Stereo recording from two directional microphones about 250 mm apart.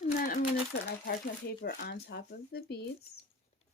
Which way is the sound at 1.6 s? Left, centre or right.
Left.